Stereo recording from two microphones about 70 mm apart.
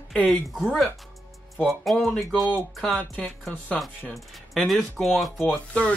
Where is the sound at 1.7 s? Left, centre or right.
Centre.